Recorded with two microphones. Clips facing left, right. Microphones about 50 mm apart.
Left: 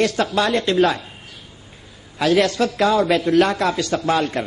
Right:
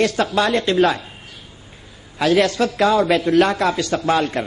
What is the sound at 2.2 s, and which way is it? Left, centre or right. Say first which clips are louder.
A man's voice: right 1 dB; centre.